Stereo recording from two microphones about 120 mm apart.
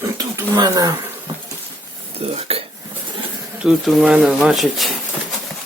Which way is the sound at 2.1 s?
55° right (ahead or behind).